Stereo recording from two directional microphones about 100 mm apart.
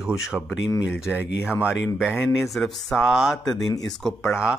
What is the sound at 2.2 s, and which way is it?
Speech, centre (ahead or behind).